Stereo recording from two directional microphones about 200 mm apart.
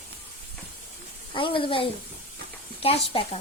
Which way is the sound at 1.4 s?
25° left (ahead or behind).